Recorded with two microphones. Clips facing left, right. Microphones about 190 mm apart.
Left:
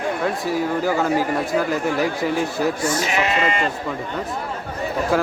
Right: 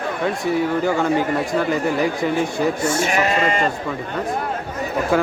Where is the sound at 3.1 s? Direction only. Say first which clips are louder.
Right 2 dB; 45° right (ahead or behind).